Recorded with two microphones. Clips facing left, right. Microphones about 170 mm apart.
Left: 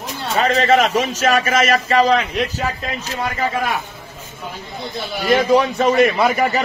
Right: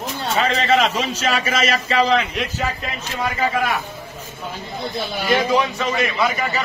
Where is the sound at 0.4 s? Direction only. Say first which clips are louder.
Left 3 dB; 45° left (ahead or behind).